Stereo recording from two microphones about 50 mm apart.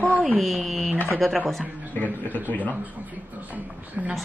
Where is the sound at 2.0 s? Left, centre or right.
Left.